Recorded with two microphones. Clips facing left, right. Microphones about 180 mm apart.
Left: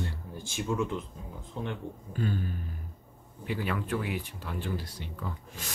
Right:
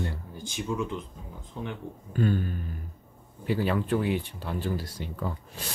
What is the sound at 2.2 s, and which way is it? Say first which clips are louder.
Speech: right 6 dB; 55° right (ahead or behind).